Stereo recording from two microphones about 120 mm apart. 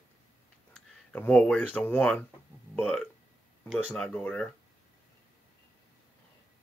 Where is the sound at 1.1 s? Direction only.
10° left (ahead or behind).